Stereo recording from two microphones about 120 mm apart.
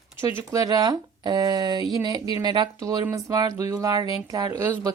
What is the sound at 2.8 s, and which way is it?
Speech, 25° right (ahead or behind).